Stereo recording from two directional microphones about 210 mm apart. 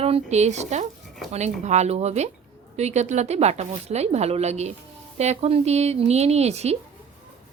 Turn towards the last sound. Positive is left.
turn(degrees=-30)  # may be behind; listen again after turning